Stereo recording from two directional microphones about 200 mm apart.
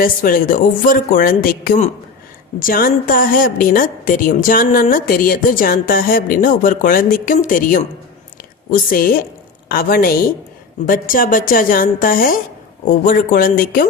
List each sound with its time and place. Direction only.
0.0 s a woman's voice: 45° left (ahead or behind)